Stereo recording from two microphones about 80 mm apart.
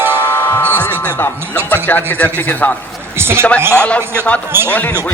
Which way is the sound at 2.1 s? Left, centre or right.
Left.